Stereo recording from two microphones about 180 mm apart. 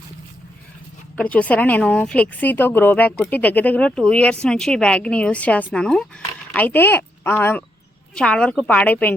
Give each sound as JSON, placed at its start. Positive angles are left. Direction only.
{"t": 1.1, "sound": "speech", "side_deg": 10}